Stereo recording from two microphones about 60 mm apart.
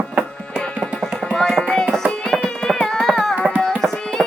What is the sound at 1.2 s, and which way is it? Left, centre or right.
Music, centre.